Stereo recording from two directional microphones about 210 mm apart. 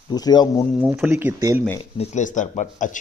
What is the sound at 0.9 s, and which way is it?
Speech, 10° right (ahead or behind).